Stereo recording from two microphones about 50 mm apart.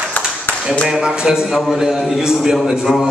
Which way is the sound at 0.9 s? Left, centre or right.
Centre.